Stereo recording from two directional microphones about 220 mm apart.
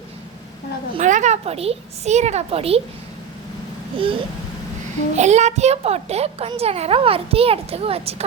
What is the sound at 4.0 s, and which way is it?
A child's voice, 25° right (ahead or behind).